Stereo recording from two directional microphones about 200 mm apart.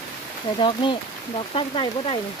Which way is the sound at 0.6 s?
25° left (ahead or behind).